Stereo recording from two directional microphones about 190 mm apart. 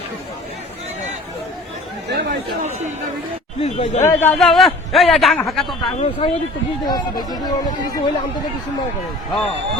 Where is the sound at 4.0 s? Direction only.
10° left (ahead or behind).